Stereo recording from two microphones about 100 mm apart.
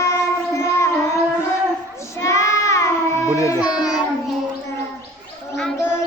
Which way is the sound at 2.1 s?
30° left (ahead or behind).